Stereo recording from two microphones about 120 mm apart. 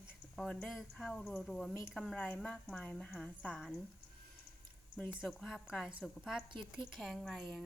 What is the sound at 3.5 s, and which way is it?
Speech, 5° right (ahead or behind).